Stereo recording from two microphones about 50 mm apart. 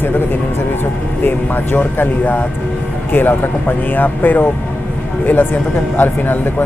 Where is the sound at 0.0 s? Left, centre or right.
Left.